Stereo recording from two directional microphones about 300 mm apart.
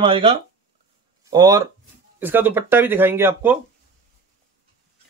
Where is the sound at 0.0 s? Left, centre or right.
Centre.